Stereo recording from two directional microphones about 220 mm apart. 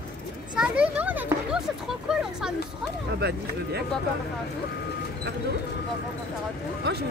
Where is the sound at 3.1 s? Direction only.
45° right (ahead or behind).